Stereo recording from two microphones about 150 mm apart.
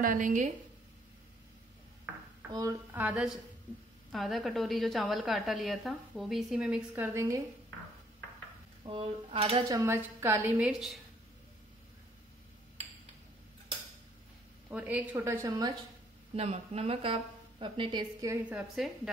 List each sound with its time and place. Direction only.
0.0 s a woman's voice: 65° right (ahead or behind)
2.1 s a sound: 10° right (ahead or behind)
2.9 s a woman's voice: 10° right (ahead or behind)
7.2 s speech: 20° right (ahead or behind)
8.8 s a woman's voice: 40° right (ahead or behind)
9.7 s a woman's voice: 20° right (ahead or behind)
10.7 s a woman's voice: centre (ahead or behind)
14.7 s a woman's voice: 10° right (ahead or behind)
16.3 s a woman's voice: 45° right (ahead or behind)
18.2 s a woman's voice: 20° right (ahead or behind)